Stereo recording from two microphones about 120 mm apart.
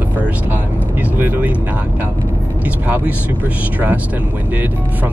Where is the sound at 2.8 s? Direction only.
15° right (ahead or behind).